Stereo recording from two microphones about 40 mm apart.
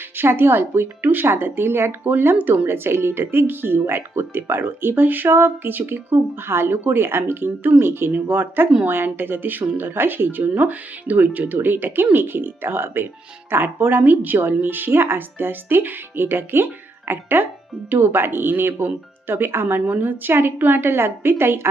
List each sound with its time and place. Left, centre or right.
0.2 s speech: right
1.1 s speech: right
2.3 s speech: right
2.6 s speech: right
8.1 s speech: right
10.6 s speech: right
11.5 s speech: right
14.0 s speech: right
19.3 s speech: right
19.9 s speech: right
20.3 s speech: right